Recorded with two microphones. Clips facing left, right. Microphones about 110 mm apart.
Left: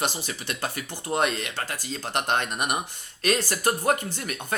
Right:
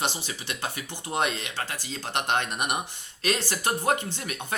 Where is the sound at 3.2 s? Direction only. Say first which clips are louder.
Left 3 dB; 20° right (ahead or behind).